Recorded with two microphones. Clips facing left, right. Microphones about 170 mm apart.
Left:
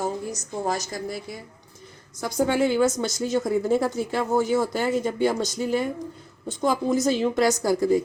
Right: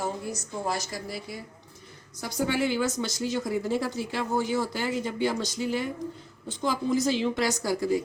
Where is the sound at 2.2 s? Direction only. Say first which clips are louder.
Left 5 dB; 45° left (ahead or behind).